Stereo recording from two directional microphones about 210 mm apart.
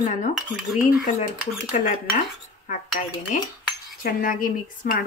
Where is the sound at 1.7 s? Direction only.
40° left (ahead or behind).